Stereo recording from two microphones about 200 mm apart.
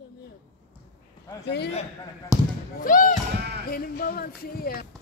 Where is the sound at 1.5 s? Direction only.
55° left (ahead or behind).